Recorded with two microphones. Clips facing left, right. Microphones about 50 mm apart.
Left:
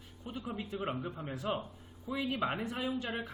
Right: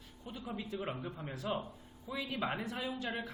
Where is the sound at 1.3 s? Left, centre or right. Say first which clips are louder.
Left 1 dB; left.